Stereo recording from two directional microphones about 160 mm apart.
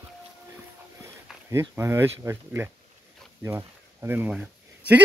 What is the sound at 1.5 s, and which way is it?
Speech, 15° right (ahead or behind).